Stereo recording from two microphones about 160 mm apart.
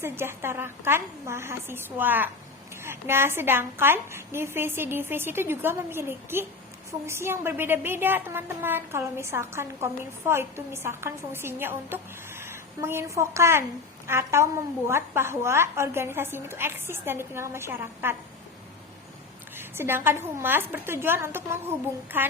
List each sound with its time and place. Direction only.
0.0 s a woman's voice: 15° right (ahead or behind)
19.5 s a woman's voice: 15° right (ahead or behind)